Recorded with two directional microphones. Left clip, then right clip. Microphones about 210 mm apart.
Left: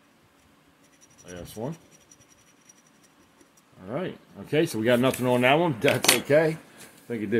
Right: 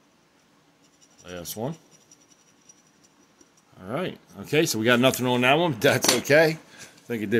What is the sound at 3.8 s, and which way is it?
Speech, 20° right (ahead or behind).